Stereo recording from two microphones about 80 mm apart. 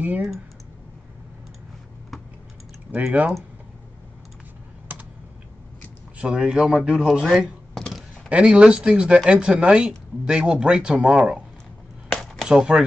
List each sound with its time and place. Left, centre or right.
2.9 s speech: centre
6.1 s speech: centre
7.7 s a sound: centre
8.3 s speech: centre
12.1 s a sound: centre
12.4 s speech: centre